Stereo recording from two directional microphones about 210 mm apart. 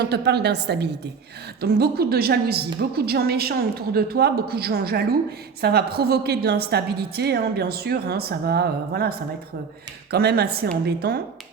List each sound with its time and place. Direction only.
0.0 s a woman's voice: 50° right (ahead or behind)